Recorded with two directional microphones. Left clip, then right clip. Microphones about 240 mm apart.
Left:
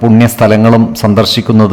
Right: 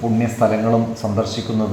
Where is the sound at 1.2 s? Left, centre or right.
Left.